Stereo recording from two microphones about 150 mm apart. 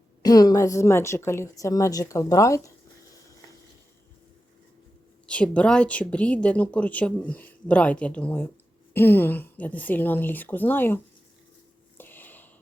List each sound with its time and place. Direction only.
0.2 s a woman's voice: 25° left (ahead or behind)
5.2 s a woman's voice: 10° left (ahead or behind)
11.9 s a sound: 15° left (ahead or behind)